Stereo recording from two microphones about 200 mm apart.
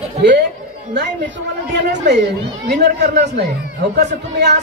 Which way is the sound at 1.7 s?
60° right (ahead or behind).